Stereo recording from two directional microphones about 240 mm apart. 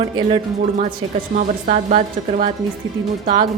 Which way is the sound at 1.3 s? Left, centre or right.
Right.